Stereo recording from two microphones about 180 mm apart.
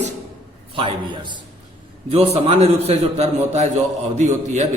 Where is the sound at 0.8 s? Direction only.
30° right (ahead or behind).